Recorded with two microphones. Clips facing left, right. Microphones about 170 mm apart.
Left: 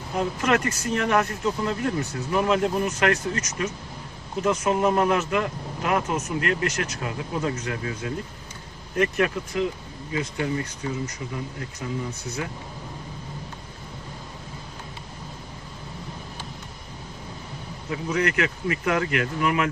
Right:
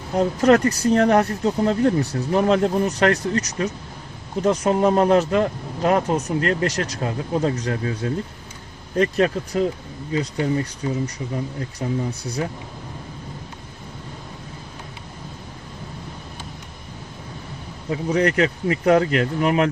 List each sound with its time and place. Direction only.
0.2 s speech: 35° right (ahead or behind)
17.8 s speech: 30° right (ahead or behind)